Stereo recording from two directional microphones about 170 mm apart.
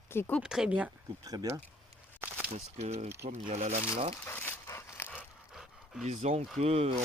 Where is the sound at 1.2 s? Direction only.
20° right (ahead or behind).